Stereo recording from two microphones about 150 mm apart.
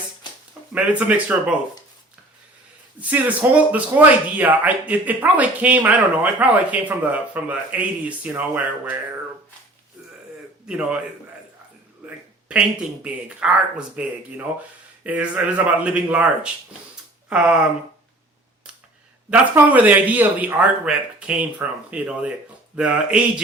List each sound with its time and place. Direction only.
0.2 s a sound: 30° left (ahead or behind)
0.7 s speech: 10° right (ahead or behind)
3.0 s speech: 10° right (ahead or behind)
10.7 s speech: 5° right (ahead or behind)
12.0 s speech: 10° right (ahead or behind)
19.3 s speech: 10° right (ahead or behind)